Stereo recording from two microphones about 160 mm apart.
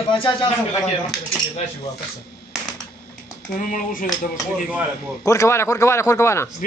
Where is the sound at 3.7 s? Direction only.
60° left (ahead or behind).